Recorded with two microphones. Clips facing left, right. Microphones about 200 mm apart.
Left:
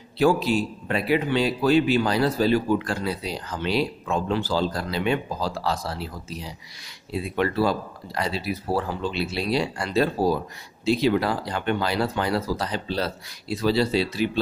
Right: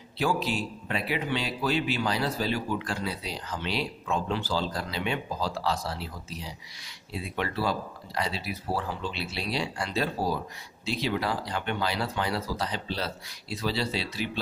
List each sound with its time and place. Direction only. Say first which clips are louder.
0.2 s a man's voice: left 8 dB; 40° left (ahead or behind)